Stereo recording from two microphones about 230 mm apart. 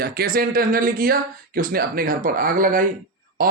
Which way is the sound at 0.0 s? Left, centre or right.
Right.